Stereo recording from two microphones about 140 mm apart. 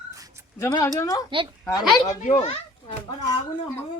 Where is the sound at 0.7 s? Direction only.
25° left (ahead or behind).